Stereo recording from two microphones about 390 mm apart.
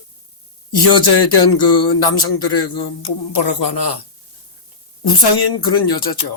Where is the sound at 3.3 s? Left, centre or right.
Left.